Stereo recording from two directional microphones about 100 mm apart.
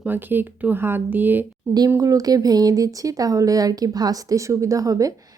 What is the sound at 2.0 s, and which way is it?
A woman's voice, 35° right (ahead or behind).